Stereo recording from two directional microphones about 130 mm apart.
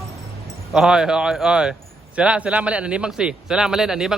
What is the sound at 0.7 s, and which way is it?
A man's voice, 5° right (ahead or behind).